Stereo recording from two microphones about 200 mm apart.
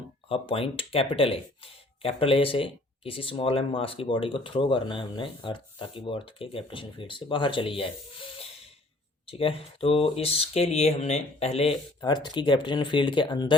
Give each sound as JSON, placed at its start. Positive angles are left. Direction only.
{"t": 0.3, "sound": "speech", "side_deg": 25}
{"t": 9.2, "sound": "speech", "side_deg": 30}